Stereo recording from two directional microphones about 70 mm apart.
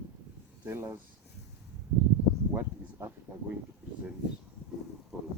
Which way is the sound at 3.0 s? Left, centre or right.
Right.